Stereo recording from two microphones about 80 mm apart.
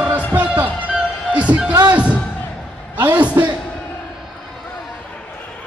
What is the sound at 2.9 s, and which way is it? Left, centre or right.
Speech, right.